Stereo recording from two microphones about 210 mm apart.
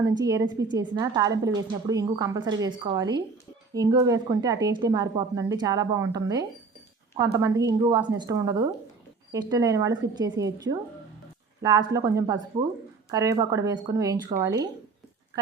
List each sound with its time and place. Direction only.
0.0 s a woman's voice: 15° right (ahead or behind)